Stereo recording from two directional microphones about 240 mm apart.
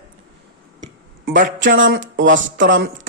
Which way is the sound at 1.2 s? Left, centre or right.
Right.